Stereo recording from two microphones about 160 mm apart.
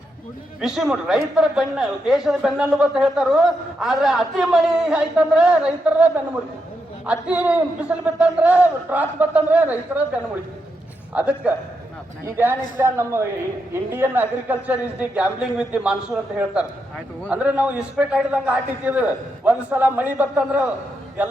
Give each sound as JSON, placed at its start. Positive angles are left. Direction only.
{"t": 0.6, "sound": "a man's voice", "side_deg": 0}
{"t": 11.1, "sound": "a man's voice", "side_deg": -10}